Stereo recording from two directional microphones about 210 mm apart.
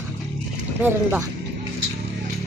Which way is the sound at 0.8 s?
10° right (ahead or behind).